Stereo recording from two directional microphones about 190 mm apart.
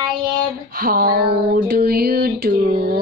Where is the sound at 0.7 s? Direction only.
50° right (ahead or behind).